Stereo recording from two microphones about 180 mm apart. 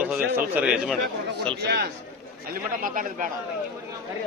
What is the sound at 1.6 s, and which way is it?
Speech, 65° right (ahead or behind).